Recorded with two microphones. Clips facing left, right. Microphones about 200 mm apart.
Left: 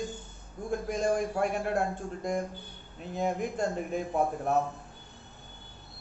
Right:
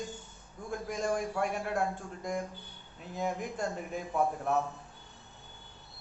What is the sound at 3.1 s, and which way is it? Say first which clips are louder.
Speech: left 4 dB; 25° left (ahead or behind).